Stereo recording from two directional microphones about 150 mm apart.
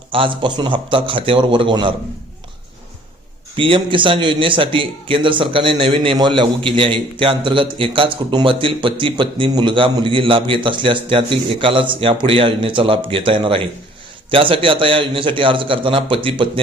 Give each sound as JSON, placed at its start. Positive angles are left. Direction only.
{"t": 0.1, "sound": "a man's voice", "side_deg": -35}
{"t": 3.5, "sound": "a man's voice", "side_deg": -35}